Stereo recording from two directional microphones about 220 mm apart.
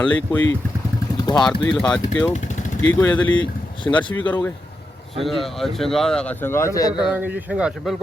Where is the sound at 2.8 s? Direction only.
10° left (ahead or behind).